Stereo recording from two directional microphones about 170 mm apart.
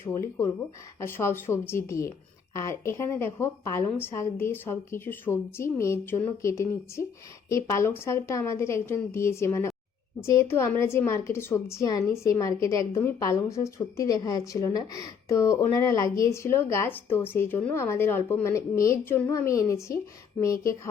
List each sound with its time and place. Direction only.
0.0 s a woman's voice: 15° left (ahead or behind)